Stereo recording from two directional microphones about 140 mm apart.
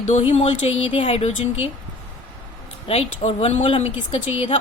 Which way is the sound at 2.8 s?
45° left (ahead or behind).